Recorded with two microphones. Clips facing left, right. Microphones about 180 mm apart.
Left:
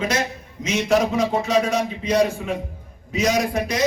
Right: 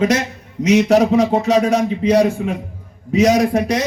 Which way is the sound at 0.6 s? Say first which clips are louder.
Right 10 dB; 70° right (ahead or behind).